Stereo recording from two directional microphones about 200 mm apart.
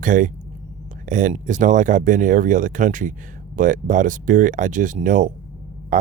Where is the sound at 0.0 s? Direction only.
40° right (ahead or behind).